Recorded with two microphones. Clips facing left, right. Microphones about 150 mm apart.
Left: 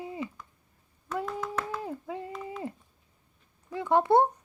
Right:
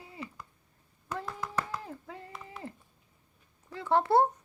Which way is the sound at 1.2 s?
15° left (ahead or behind).